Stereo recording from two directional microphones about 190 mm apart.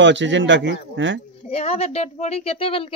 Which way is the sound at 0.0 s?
75° right (ahead or behind).